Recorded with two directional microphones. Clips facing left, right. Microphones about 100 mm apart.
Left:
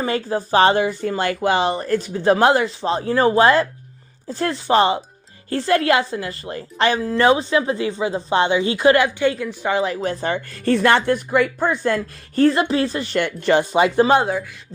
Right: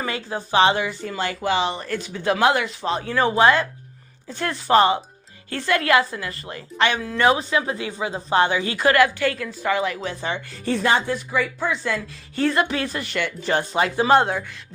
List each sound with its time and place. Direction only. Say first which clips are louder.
0.0 s a woman's voice: left 6 dB; 35° left (ahead or behind)
10.0 s speech: left 5 dB; 45° left (ahead or behind)
12.5 s speech: left 1 dB; 30° left (ahead or behind)
13.1 s speech: left 5 dB; 55° left (ahead or behind)
14.0 s speech: even; 15° left (ahead or behind)